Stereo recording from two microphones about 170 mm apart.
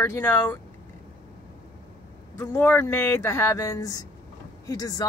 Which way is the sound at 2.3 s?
15° left (ahead or behind).